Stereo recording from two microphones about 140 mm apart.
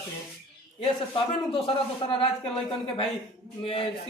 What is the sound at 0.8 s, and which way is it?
Speech, 40° left (ahead or behind).